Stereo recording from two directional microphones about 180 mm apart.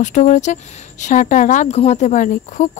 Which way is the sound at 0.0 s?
40° left (ahead or behind).